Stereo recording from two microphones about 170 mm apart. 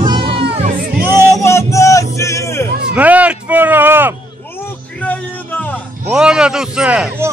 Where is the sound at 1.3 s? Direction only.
15° left (ahead or behind).